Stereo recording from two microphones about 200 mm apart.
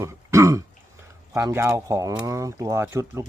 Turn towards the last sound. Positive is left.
turn(degrees=-15)  # may be behind; listen again after turning